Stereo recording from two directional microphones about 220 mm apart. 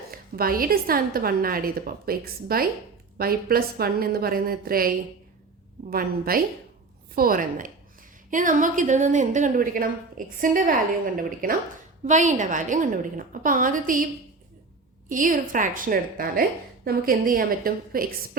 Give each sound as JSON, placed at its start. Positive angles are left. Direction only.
{"t": 0.1, "sound": "a woman's voice", "side_deg": -40}
{"t": 5.9, "sound": "a woman's voice", "side_deg": -40}
{"t": 15.1, "sound": "a woman's voice", "side_deg": -35}